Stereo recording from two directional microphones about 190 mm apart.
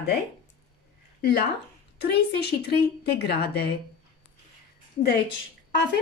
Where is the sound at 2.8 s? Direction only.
55° left (ahead or behind).